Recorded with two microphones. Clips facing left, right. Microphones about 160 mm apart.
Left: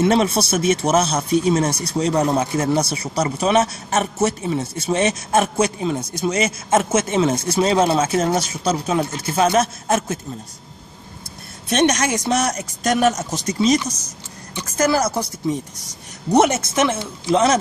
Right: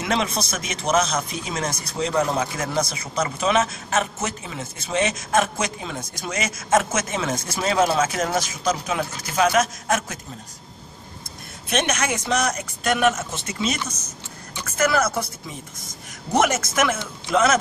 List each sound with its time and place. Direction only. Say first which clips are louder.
0.0 s a man's voice: left 7 dB; 30° left (ahead or behind)
2.4 s a man's voice: left 6 dB; 30° left (ahead or behind)
11.7 s a man's voice: left 6 dB; 40° left (ahead or behind)
16.3 s speech: left 4 dB; 30° left (ahead or behind)